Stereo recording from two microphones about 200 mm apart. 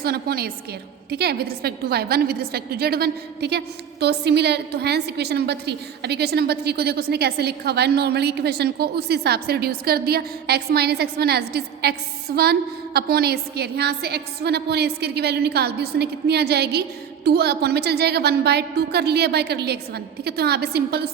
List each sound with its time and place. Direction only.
0.0 s a woman's voice: 50° right (ahead or behind)